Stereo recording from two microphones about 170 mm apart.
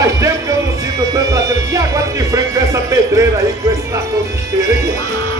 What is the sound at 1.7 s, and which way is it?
Speech, 20° right (ahead or behind).